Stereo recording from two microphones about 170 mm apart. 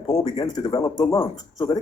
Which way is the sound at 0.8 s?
15° left (ahead or behind).